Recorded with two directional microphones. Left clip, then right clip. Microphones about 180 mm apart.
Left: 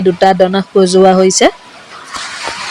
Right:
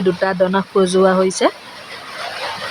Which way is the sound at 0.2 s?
25° left (ahead or behind).